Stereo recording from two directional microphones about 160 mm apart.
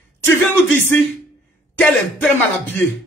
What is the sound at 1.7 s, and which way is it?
A woman's voice, 10° left (ahead or behind).